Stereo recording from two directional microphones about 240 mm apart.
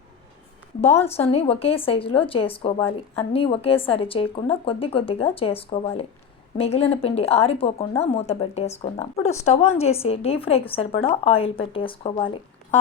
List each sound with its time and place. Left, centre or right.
0.8 s a woman's voice: left